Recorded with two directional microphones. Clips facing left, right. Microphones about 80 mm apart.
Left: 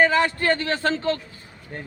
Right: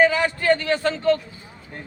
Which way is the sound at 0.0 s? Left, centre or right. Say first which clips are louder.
Right 1 dB; left.